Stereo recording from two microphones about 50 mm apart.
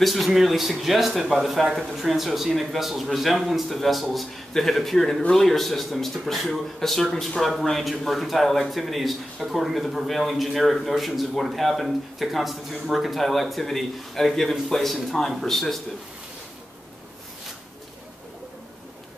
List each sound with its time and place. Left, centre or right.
0.0 s a man's voice: centre